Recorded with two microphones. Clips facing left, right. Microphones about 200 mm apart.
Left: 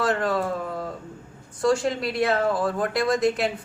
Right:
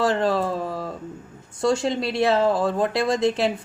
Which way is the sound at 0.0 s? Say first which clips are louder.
Right 3 dB; 25° right (ahead or behind).